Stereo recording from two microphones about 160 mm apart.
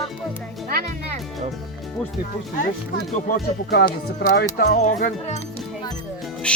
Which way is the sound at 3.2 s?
80° left.